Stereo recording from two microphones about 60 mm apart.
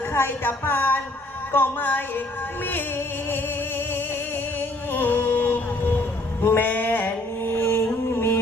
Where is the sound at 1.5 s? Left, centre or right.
Left.